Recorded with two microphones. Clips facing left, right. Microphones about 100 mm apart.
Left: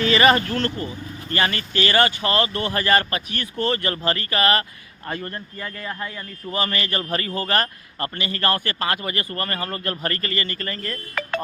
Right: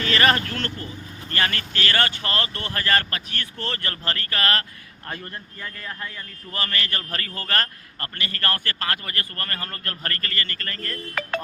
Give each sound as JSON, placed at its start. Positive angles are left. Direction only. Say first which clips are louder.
{"t": 0.0, "sound": "a man's voice", "louder": "left 4 dB", "side_deg": 5}
{"t": 5.0, "sound": "speech", "louder": "left 5 dB", "side_deg": 0}
{"t": 6.5, "sound": "a man's voice", "louder": "left 4 dB", "side_deg": 15}